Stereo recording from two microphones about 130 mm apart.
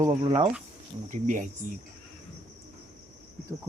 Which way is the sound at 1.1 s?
75° right (ahead or behind).